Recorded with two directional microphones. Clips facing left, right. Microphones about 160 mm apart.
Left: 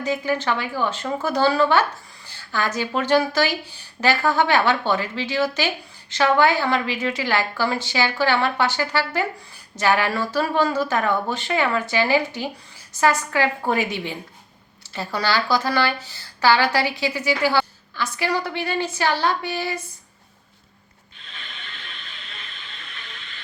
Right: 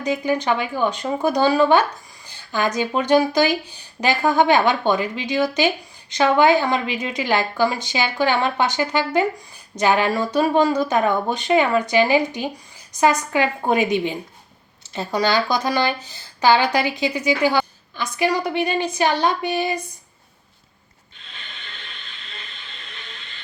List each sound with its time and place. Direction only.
0.0 s speech: 15° right (ahead or behind)